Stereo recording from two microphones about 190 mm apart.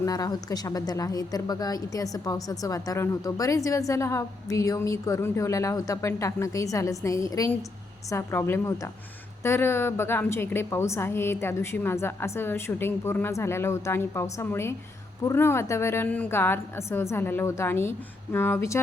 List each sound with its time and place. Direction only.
0.0 s a woman's voice: 20° left (ahead or behind)